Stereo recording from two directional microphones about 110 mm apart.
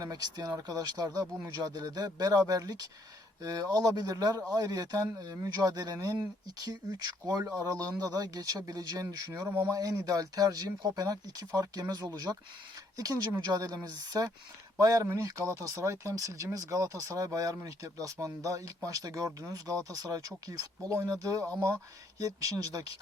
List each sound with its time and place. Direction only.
0.0 s speech: 35° right (ahead or behind)
13.4 s speech: 40° right (ahead or behind)
21.4 s speech: 10° left (ahead or behind)
22.2 s speech: 35° right (ahead or behind)